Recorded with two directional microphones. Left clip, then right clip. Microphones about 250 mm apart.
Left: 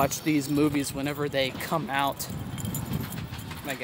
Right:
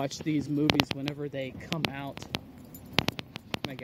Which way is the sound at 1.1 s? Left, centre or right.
Centre.